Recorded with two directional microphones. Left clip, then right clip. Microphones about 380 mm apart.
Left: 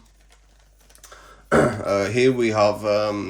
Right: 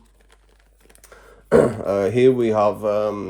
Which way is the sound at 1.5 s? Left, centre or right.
Centre.